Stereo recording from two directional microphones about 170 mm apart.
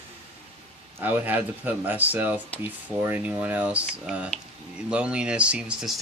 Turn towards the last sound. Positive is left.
turn(degrees=-5)  # may be behind; listen again after turning